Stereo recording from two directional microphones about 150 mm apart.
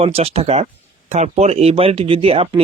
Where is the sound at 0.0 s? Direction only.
40° right (ahead or behind).